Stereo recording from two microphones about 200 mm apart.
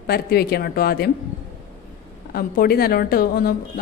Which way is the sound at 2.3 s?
50° left (ahead or behind).